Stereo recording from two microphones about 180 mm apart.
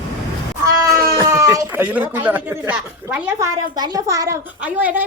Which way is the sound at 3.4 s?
20° right (ahead or behind).